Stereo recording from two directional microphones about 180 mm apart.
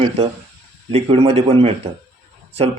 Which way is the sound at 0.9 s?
30° right (ahead or behind).